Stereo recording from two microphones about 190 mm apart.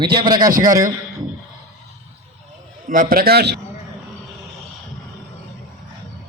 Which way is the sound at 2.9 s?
45° right (ahead or behind).